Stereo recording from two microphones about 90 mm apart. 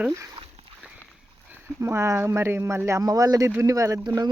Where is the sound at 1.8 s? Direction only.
30° right (ahead or behind).